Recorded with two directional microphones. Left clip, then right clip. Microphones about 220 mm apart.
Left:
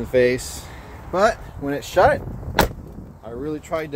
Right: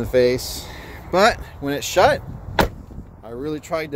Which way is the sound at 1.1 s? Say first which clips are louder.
Right 2 dB; 25° right (ahead or behind).